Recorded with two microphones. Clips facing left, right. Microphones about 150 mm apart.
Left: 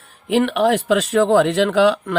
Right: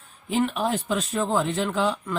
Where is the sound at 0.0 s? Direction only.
80° left.